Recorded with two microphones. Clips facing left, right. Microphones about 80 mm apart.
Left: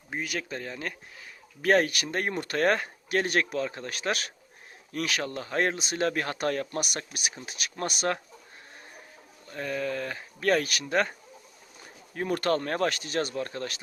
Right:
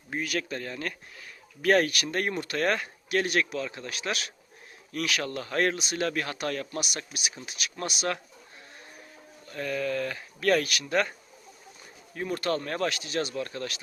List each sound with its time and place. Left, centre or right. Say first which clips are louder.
0.1 s speech: right 2 dB; centre; by 8.2 s left
9.5 s speech: right 1 dB; left
12.1 s speech: left 3 dB; left